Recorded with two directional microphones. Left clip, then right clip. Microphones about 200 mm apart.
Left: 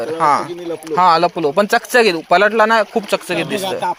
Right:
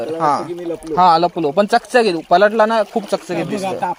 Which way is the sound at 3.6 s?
35° right (ahead or behind).